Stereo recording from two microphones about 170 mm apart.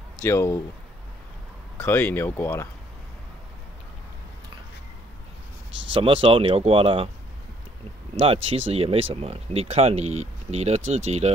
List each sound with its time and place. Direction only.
0.2 s speech: 15° left (ahead or behind)
1.8 s speech: 10° left (ahead or behind)
5.9 s speech: 35° right (ahead or behind)
8.2 s speech: 35° right (ahead or behind)